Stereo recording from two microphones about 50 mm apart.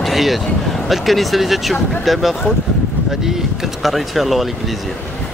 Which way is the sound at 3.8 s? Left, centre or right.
Centre.